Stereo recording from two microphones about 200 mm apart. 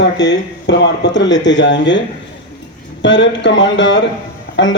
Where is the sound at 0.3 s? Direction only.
60° left (ahead or behind).